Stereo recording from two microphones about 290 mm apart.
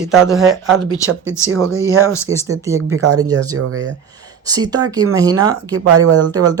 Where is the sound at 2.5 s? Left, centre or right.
Centre.